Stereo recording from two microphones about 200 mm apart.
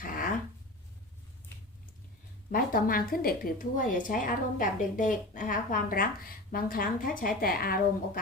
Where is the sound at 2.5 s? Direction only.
45° left (ahead or behind).